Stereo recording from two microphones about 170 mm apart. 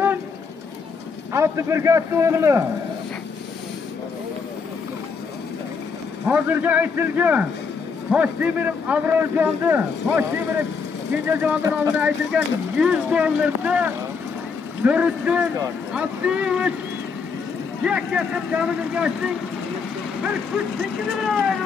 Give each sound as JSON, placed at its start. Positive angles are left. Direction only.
{"t": 1.3, "sound": "a man's voice", "side_deg": -15}
{"t": 6.2, "sound": "a man's voice", "side_deg": -10}
{"t": 11.2, "sound": "a man's voice", "side_deg": -10}
{"t": 17.8, "sound": "speech", "side_deg": -5}